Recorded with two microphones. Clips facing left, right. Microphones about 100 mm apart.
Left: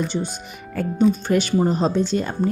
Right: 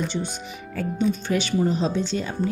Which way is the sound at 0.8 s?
50° left (ahead or behind).